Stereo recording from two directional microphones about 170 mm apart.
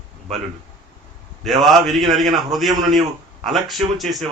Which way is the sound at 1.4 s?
Centre (ahead or behind).